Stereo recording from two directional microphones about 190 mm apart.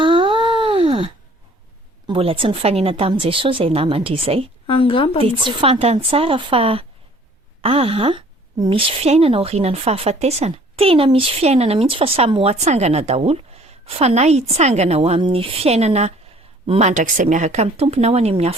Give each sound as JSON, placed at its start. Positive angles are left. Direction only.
{"t": 0.0, "sound": "a sound", "side_deg": -25}
{"t": 2.0, "sound": "a woman's voice", "side_deg": -30}
{"t": 4.6, "sound": "a woman's voice", "side_deg": 30}
{"t": 5.2, "sound": "a woman's voice", "side_deg": -25}